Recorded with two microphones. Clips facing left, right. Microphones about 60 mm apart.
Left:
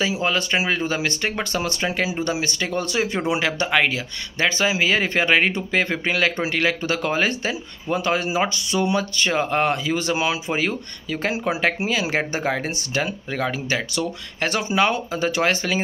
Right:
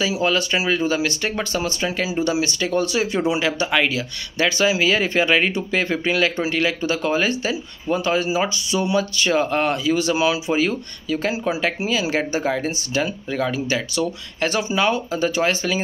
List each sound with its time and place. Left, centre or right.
0.0 s speech: left
3.7 s speech: left